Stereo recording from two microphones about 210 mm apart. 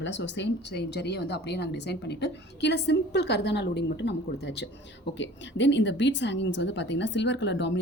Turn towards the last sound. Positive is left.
turn(degrees=55)  # may be behind; listen again after turning